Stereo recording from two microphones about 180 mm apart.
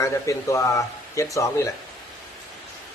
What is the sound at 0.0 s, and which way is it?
Speech, 15° left (ahead or behind).